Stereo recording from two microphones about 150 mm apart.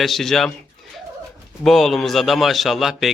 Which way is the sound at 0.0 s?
Centre (ahead or behind).